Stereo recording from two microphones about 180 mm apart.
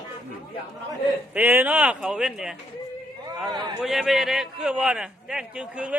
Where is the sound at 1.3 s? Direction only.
10° right (ahead or behind).